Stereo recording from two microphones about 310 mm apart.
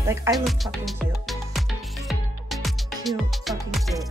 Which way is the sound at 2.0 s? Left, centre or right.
Centre.